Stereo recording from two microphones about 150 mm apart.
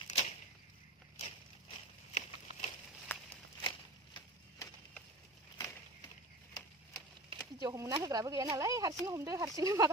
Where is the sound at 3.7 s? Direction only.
30° left (ahead or behind).